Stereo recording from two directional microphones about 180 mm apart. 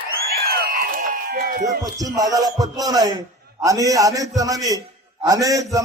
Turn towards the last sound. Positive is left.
turn(degrees=-20)  # may be behind; listen again after turning